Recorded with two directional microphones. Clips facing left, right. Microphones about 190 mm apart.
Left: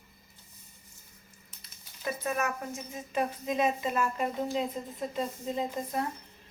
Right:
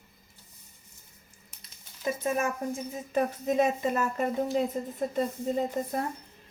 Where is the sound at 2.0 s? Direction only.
25° right (ahead or behind).